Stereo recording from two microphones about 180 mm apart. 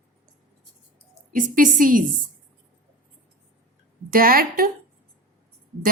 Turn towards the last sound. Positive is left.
turn(degrees=-55)  # may be behind; listen again after turning